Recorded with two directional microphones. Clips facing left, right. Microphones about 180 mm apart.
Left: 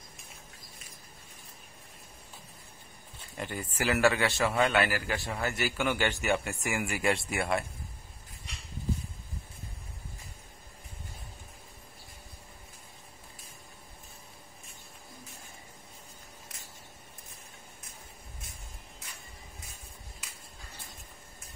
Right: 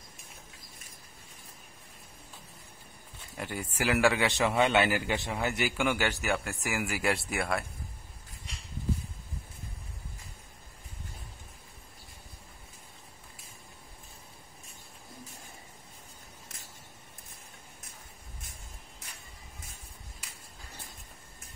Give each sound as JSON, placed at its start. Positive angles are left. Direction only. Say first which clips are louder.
{"t": 3.3, "sound": "a man's voice", "louder": "even", "side_deg": -10}